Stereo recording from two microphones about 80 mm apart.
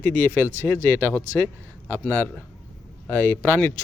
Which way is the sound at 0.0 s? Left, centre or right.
Left.